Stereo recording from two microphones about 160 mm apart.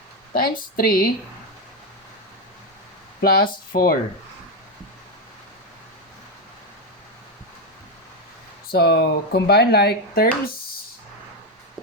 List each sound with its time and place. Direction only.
0.3 s speech: 65° left (ahead or behind)
3.2 s speech: 65° left (ahead or behind)
8.7 s speech: 85° left